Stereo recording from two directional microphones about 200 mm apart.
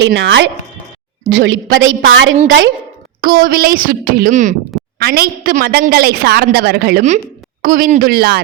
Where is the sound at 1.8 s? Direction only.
75° right (ahead or behind).